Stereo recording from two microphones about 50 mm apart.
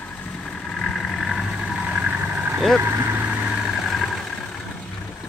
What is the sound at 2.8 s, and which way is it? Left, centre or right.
Speech, right.